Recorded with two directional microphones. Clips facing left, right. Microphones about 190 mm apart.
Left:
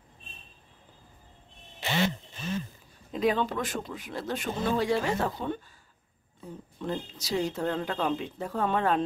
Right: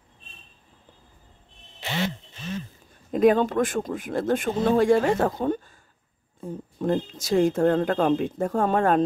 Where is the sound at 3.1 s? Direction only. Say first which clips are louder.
Right 8 dB; 50° right (ahead or behind).